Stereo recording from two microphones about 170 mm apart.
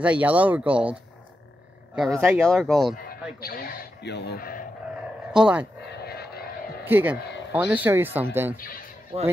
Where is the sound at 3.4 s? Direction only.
60° left (ahead or behind).